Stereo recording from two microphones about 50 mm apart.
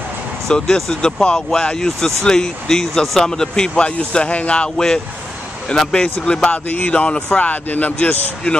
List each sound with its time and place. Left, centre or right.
0.5 s a man's voice: centre; by 4.6 s left
4.7 s speech: centre
6.5 s speech: left
6.9 s a man's voice: left
7.3 s speech: left